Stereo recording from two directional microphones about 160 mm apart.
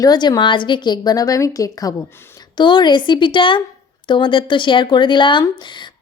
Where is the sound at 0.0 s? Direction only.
25° left (ahead or behind).